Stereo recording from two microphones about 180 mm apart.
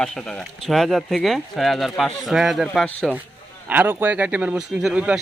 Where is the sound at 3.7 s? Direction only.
10° right (ahead or behind).